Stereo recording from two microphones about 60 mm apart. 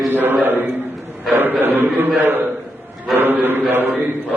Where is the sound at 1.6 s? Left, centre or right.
Right.